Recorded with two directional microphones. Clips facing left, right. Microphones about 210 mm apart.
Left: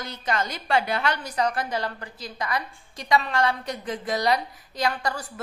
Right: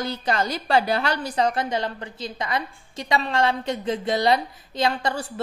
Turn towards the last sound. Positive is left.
turn(degrees=-25)  # may be behind; listen again after turning